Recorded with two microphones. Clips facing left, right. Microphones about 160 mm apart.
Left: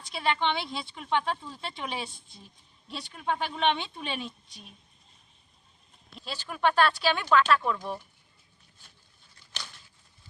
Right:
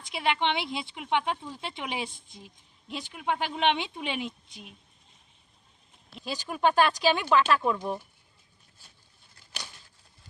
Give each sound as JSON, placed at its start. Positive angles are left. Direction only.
{"t": 0.1, "sound": "speech", "side_deg": -20}
{"t": 6.1, "sound": "speech", "side_deg": -15}